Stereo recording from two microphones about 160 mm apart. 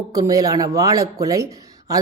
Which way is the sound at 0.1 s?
20° right (ahead or behind).